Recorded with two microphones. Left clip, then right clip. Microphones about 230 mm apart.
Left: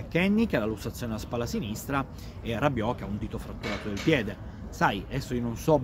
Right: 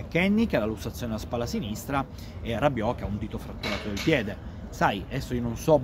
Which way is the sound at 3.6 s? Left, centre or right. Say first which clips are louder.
Right 3 dB; right.